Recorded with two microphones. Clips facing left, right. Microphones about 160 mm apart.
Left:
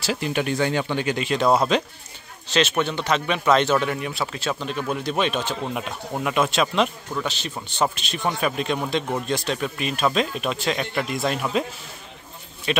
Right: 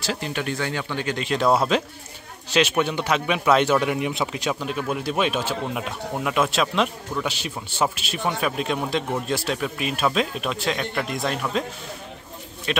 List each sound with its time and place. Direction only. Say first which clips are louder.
0.0 s speech: left 3 dB; 10° left (ahead or behind)
1.0 s a man's voice: right 2 dB; 5° left (ahead or behind)
7.2 s a man's voice: right 1 dB; 10° right (ahead or behind)
12.7 s a man's voice: left 2 dB; centre (ahead or behind)